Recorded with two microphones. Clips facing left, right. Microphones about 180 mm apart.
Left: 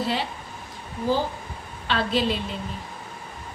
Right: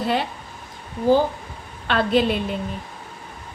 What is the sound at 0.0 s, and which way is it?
Speech, 55° right (ahead or behind).